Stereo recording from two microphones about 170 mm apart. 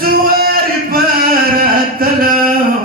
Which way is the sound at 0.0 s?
60° right (ahead or behind).